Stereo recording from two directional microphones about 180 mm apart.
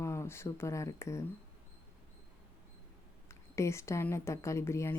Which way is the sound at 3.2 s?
15° left (ahead or behind).